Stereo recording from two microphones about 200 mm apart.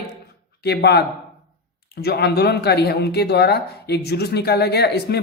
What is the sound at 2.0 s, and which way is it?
Speech, 50° left (ahead or behind).